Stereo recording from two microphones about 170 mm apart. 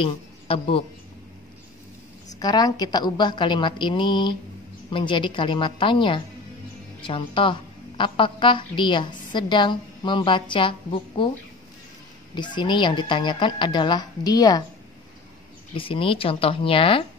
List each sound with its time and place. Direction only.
0.0 s a man's voice: 30° left (ahead or behind)
2.3 s a woman's voice: 25° left (ahead or behind)
12.4 s a woman's voice: 25° left (ahead or behind)
15.7 s speech: 30° left (ahead or behind)